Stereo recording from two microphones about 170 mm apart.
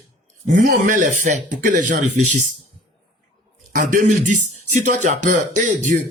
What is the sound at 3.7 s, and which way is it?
Speech, 55° right (ahead or behind).